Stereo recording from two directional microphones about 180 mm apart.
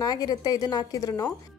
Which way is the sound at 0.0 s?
20° left (ahead or behind).